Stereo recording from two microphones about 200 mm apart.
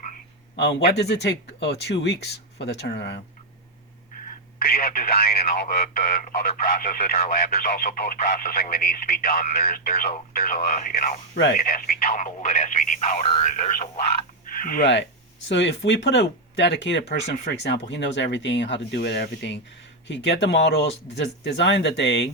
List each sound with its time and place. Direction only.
0.9 s speech: 55° left (ahead or behind)
4.6 s speech: 45° left (ahead or behind)
15.4 s speech: 65° left (ahead or behind)